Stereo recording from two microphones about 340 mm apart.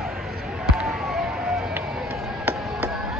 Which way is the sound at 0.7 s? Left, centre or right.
Centre.